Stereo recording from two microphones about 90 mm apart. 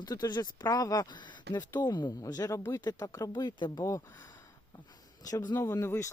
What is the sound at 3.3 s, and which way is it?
Speech, 55° left (ahead or behind).